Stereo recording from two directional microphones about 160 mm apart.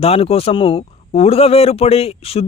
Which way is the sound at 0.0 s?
40° left (ahead or behind).